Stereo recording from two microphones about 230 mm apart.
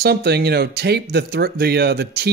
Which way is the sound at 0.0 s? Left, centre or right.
Right.